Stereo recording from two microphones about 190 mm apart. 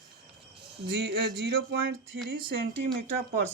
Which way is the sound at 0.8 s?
60° right (ahead or behind).